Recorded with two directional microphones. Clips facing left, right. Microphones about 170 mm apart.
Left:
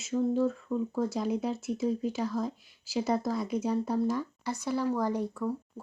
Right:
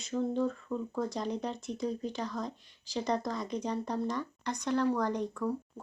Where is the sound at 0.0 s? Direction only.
5° left (ahead or behind).